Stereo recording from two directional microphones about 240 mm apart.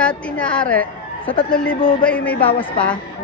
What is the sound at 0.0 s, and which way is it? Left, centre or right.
A woman's voice, centre.